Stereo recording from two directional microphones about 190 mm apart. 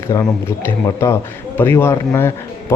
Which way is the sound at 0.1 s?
15° left (ahead or behind).